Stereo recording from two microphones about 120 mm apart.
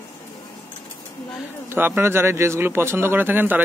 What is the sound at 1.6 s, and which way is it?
A man's voice, 15° right (ahead or behind).